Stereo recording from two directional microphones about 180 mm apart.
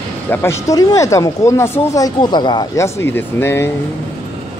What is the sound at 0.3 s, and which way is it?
Speech, 15° left (ahead or behind).